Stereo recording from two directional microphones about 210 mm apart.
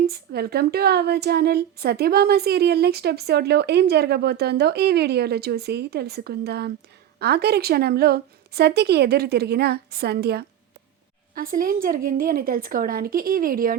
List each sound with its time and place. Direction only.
0.0 s speech: 50° right (ahead or behind)